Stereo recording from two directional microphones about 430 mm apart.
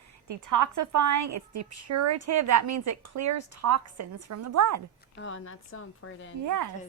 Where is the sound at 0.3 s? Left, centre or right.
Right.